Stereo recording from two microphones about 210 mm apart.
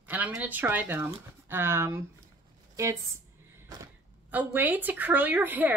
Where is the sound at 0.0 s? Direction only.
10° right (ahead or behind).